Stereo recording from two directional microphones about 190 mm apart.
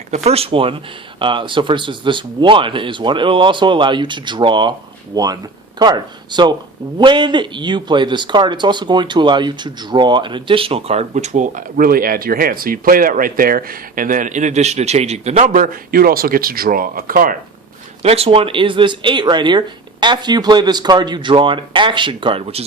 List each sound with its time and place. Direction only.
0.1 s a man's voice: 35° right (ahead or behind)
18.0 s speech: 30° right (ahead or behind)